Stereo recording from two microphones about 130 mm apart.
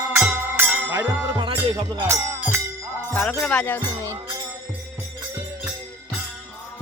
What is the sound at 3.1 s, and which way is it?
Music, 10° left (ahead or behind).